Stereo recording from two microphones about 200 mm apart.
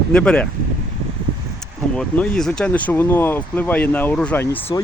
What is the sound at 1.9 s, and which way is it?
Speech, 5° left (ahead or behind).